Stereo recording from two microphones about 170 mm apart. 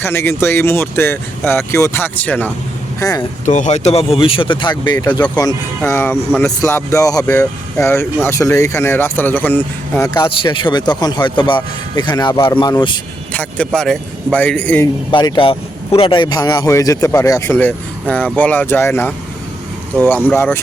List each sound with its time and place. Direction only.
0.0 s speech: 15° left (ahead or behind)
3.0 s speech: 20° left (ahead or behind)
3.4 s speech: 45° left (ahead or behind); by 10.2 s 15° left (ahead or behind)
10.2 s speech: 30° left (ahead or behind)
13.3 s speech: 10° left (ahead or behind)
15.1 s speech: 30° left (ahead or behind); by 20.6 s 10° left (ahead or behind)